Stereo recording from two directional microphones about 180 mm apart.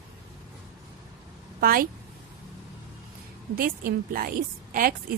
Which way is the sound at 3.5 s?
55° right (ahead or behind).